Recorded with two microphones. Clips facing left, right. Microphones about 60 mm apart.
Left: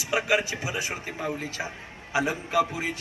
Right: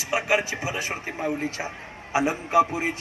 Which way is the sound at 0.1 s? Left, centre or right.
Right.